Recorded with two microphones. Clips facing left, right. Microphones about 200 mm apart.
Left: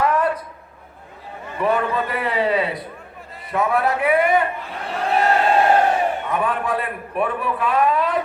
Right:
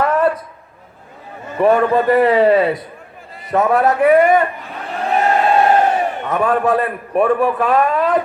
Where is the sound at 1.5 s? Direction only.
45° right (ahead or behind).